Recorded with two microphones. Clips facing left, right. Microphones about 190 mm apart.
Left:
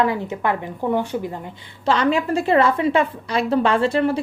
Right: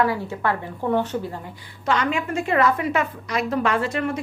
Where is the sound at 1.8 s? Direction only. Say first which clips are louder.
Left 4 dB; 30° left (ahead or behind).